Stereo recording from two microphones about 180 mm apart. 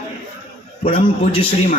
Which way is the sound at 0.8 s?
30° left (ahead or behind).